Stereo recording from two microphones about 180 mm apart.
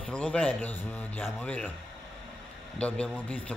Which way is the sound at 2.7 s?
5° left (ahead or behind).